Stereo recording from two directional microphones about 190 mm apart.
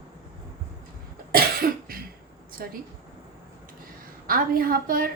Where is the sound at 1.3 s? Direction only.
50° right (ahead or behind).